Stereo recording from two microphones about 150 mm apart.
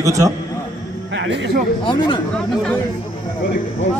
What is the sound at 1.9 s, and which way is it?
Speech, 30° left (ahead or behind).